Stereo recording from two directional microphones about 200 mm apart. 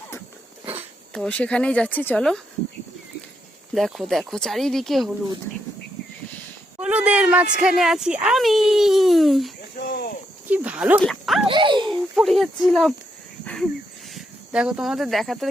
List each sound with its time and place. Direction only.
1.1 s speech: 5° left (ahead or behind)
3.8 s speech: centre (ahead or behind)
6.7 s speech: 5° right (ahead or behind)
9.7 s cricket: 50° left (ahead or behind)
10.5 s a sound: 5° right (ahead or behind)
11.4 s a sound: 25° right (ahead or behind)
11.9 s speech: centre (ahead or behind)
13.4 s a sound: 5° left (ahead or behind)
14.1 s speech: centre (ahead or behind)